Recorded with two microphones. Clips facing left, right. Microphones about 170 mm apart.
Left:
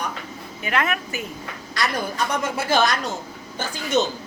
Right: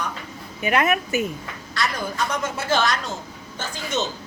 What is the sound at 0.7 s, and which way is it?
Speech, 20° right (ahead or behind).